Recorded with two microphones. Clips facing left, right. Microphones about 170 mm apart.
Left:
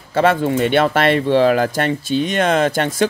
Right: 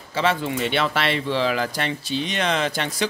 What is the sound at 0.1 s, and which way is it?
Speech, 50° left (ahead or behind).